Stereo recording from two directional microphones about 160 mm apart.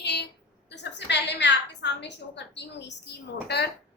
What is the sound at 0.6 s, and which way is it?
A woman's voice, 90° left.